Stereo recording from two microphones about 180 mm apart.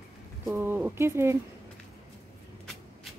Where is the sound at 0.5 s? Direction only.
10° right (ahead or behind).